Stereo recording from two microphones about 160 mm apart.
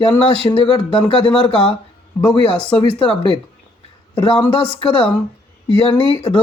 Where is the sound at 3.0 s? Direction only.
30° left (ahead or behind).